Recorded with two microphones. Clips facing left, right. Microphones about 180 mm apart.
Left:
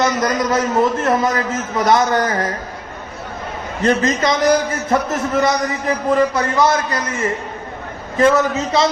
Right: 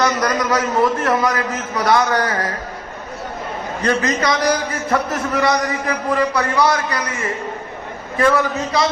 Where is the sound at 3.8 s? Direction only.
25° left (ahead or behind).